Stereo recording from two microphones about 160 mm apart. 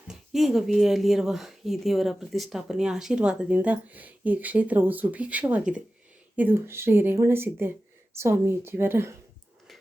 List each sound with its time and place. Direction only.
0.1 s speech: centre (ahead or behind)